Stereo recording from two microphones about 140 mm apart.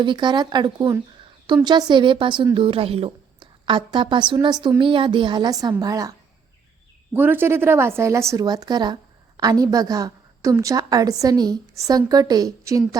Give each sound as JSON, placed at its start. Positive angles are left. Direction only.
{"t": 0.0, "sound": "a woman's voice", "side_deg": -35}
{"t": 7.1, "sound": "a woman's voice", "side_deg": -15}